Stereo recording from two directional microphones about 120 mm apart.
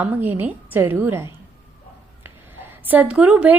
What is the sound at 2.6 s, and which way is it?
Speech, 15° right (ahead or behind).